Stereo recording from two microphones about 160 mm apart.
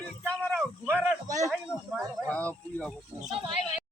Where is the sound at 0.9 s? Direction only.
15° right (ahead or behind).